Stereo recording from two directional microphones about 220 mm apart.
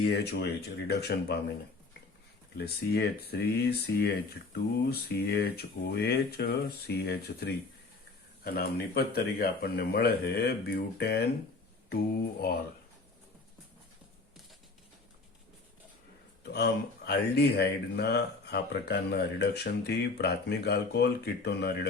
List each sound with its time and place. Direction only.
0.9 s speech: 50° left (ahead or behind)
2.6 s speech: 45° left (ahead or behind)
16.4 s speech: 50° left (ahead or behind)